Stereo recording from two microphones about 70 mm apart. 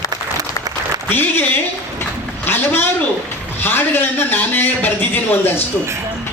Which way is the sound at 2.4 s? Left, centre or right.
Left.